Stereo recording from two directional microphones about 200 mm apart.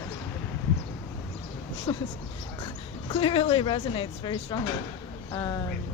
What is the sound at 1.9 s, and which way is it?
Speech, 25° left (ahead or behind).